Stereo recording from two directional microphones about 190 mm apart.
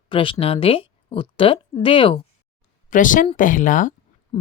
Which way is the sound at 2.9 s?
45° left (ahead or behind).